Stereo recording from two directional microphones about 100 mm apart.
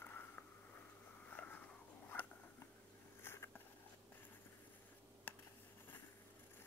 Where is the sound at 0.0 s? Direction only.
20° left (ahead or behind).